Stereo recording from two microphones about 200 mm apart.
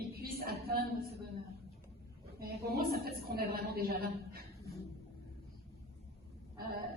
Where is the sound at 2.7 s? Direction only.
50° right (ahead or behind).